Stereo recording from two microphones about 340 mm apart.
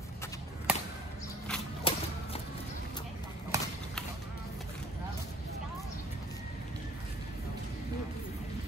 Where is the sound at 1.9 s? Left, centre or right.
Centre.